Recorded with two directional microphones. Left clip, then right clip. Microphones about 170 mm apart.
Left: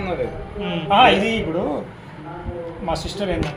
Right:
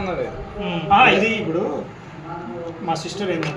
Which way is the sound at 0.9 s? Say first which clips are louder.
Even; 60° left (ahead or behind).